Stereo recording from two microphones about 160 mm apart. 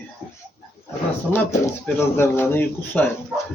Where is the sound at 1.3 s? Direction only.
15° left (ahead or behind).